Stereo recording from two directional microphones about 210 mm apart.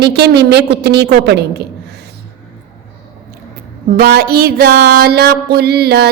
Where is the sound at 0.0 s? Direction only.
50° right (ahead or behind).